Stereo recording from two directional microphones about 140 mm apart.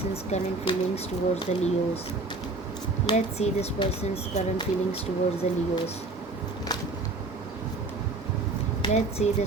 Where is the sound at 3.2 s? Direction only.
50° left (ahead or behind).